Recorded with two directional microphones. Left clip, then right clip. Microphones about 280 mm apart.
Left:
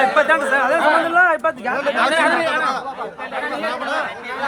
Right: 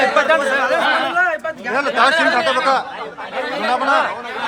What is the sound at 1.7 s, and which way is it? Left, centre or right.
Speech, right.